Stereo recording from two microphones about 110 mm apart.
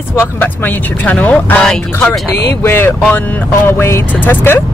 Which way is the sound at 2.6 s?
20° left (ahead or behind).